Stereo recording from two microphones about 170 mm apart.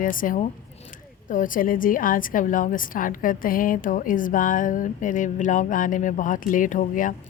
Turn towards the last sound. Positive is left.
turn(degrees=50)  # may be behind; listen again after turning